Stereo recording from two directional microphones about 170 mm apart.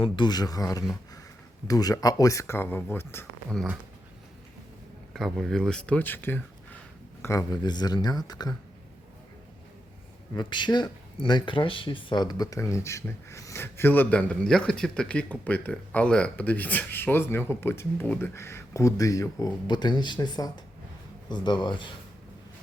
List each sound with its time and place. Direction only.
0.0 s speech: 25° left (ahead or behind)
5.1 s speech: centre (ahead or behind); by 8.5 s 25° left (ahead or behind)
10.3 s speech: 25° left (ahead or behind)